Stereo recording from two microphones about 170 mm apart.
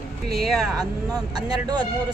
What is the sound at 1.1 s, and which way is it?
Speech, 25° right (ahead or behind).